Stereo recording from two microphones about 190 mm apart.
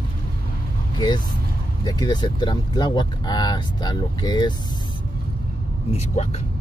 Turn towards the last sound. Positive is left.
turn(degrees=35)  # may be behind; listen again after turning